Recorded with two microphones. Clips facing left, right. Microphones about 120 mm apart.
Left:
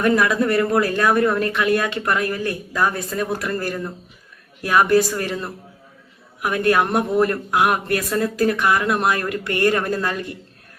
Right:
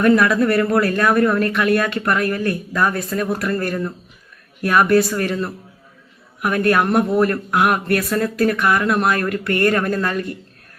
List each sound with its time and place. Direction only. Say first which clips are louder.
0.0 s speech: right 3 dB; 25° left (ahead or behind)
4.6 s speech: right 1 dB; 25° left (ahead or behind)